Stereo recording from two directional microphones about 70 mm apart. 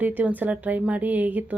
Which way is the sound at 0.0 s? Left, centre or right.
Right.